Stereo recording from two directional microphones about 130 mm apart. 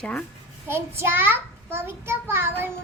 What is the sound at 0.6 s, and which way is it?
A child's voice, 20° right (ahead or behind).